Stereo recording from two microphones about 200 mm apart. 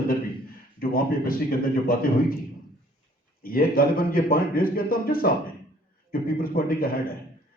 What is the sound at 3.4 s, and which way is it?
A man's voice, 45° left (ahead or behind).